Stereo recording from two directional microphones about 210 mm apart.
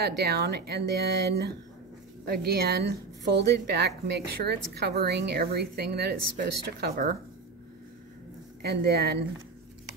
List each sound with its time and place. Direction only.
0.0 s a woman's voice: 50° right (ahead or behind)
8.6 s a woman's voice: 50° right (ahead or behind)